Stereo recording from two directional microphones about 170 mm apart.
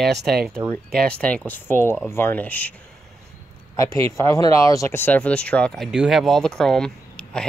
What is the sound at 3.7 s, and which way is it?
Speech, 20° left (ahead or behind).